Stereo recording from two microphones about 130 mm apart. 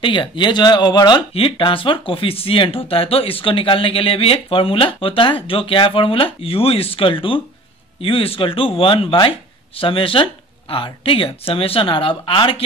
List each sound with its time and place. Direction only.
0.0 s speech: 40° left (ahead or behind)